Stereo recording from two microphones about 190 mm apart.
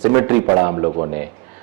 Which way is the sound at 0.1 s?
15° right (ahead or behind).